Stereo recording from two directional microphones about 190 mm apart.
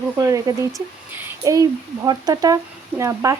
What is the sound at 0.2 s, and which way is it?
Speech, 15° right (ahead or behind).